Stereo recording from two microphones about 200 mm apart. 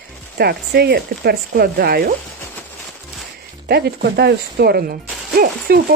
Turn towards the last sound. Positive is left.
turn(degrees=-50)  # may be behind; listen again after turning